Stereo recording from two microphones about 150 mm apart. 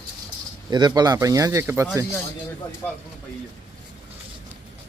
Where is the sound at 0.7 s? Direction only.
30° right (ahead or behind).